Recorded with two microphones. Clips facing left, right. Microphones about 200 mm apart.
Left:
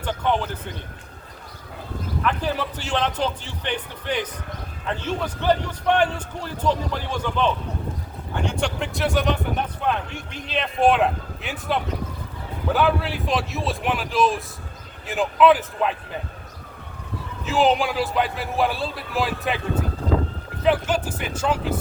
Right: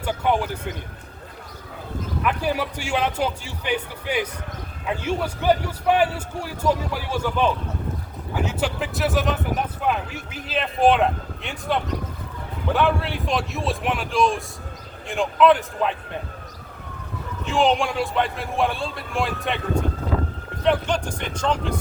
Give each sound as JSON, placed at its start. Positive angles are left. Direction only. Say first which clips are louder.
{"t": 0.0, "sound": "a man's voice", "louder": "right 1 dB", "side_deg": -10}
{"t": 2.2, "sound": "a man's voice", "louder": "right 1 dB", "side_deg": -10}
{"t": 17.4, "sound": "speech", "louder": "left 1 dB", "side_deg": 5}